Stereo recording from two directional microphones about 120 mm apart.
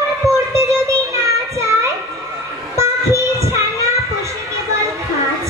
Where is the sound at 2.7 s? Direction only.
25° right (ahead or behind).